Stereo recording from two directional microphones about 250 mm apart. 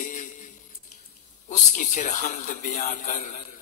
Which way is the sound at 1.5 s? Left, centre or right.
Left.